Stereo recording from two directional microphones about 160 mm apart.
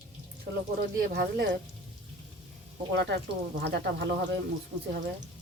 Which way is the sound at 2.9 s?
90° right.